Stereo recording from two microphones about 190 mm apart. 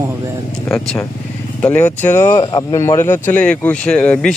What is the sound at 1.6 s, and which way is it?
Speech, 10° left (ahead or behind).